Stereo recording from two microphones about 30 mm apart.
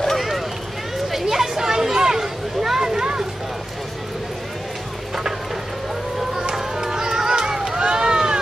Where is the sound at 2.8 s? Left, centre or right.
Right.